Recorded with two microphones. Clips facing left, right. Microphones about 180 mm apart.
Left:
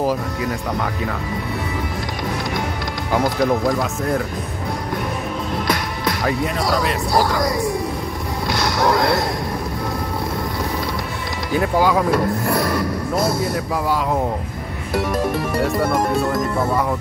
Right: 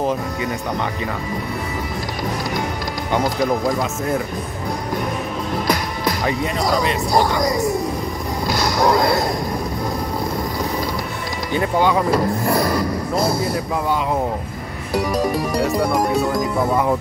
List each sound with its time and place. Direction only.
0.0 s speech: centre (ahead or behind)
3.1 s speech: centre (ahead or behind)
5.7 s speech: centre (ahead or behind)
8.5 s music: centre (ahead or behind)
11.5 s speech: 5° left (ahead or behind)
15.0 s speech: centre (ahead or behind)